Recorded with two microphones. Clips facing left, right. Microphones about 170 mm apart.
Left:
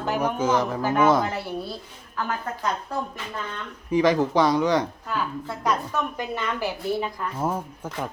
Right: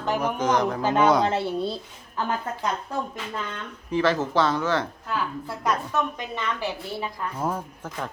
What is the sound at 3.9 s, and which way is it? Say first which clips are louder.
Speech: left 3 dB; 15° left (ahead or behind).